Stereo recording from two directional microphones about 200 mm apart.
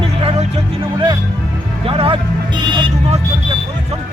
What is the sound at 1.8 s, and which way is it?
Music, 30° right (ahead or behind).